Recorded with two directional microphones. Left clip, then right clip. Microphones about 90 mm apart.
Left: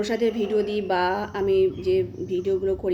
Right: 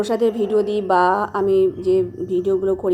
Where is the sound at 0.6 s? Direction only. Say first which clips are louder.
Right 5 dB; 40° right (ahead or behind).